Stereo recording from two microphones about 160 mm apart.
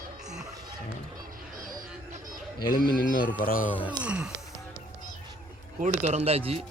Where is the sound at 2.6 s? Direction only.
65° left (ahead or behind).